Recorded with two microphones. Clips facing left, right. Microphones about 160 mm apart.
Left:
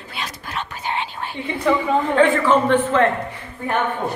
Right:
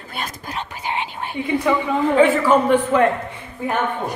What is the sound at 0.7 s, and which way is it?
Whispering, 15° right (ahead or behind).